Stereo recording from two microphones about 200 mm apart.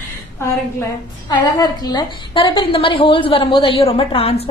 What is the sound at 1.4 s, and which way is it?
A woman's voice, 20° left (ahead or behind).